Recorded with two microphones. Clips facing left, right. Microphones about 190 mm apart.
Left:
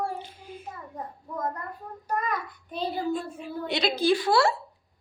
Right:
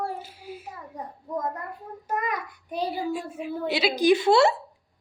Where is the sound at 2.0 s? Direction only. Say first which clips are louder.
Even; 20° right (ahead or behind).